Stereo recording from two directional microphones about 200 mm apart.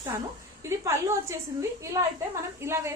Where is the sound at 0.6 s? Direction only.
15° right (ahead or behind).